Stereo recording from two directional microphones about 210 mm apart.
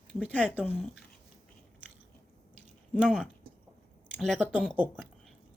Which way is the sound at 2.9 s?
5° left (ahead or behind).